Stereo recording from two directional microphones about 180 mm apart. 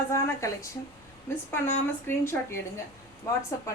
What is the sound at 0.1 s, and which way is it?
Speech, 15° left (ahead or behind).